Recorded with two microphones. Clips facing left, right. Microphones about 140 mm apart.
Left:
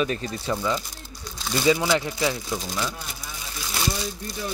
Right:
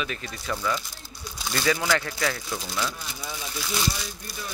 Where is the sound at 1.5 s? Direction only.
15° left (ahead or behind).